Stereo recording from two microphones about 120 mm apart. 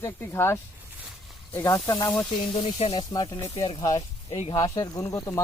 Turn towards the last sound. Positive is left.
turn(degrees=25)  # may be behind; listen again after turning